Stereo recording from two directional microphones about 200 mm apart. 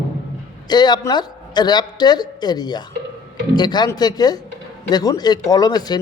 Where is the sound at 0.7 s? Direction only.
20° left (ahead or behind).